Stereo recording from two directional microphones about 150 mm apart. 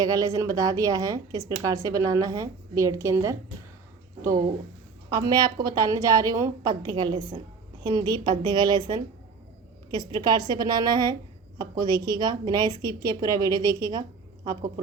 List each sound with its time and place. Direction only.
0.0 s a woman's voice: 25° right (ahead or behind)